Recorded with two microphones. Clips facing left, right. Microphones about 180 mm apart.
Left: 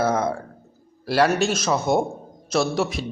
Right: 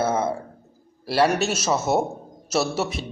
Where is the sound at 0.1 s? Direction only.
5° right (ahead or behind).